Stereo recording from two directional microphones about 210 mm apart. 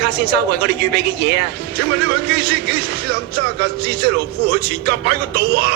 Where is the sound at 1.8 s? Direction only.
50° right (ahead or behind).